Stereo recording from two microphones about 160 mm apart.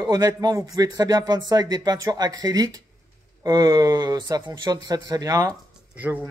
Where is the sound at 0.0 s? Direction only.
25° right (ahead or behind).